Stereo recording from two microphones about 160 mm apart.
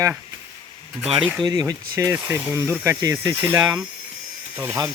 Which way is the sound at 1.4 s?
25° right (ahead or behind).